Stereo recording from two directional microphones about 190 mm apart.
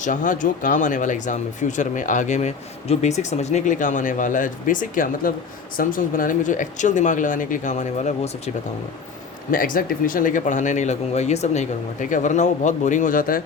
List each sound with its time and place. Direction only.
0.0 s speech: 40° left (ahead or behind)
9.5 s speech: 45° left (ahead or behind)